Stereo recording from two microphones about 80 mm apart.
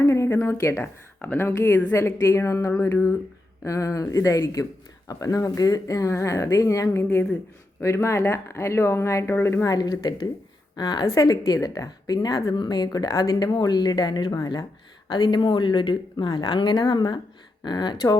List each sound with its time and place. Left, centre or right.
0.3 s speech: left
0.8 s speech: left
9.6 s a woman's voice: left
11.0 s a woman's voice: left
15.0 s a woman's voice: left